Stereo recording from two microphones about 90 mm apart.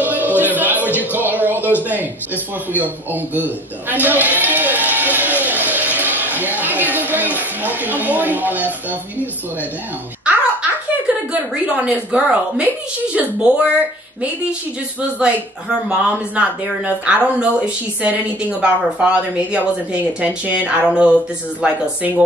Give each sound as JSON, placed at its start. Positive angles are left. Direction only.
{"t": 0.0, "sound": "music", "side_deg": -20}
{"t": 10.3, "sound": "music", "side_deg": -10}
{"t": 11.1, "sound": "a sound", "side_deg": -15}
{"t": 11.6, "sound": "speech", "side_deg": -10}
{"t": 15.0, "sound": "speech", "side_deg": -10}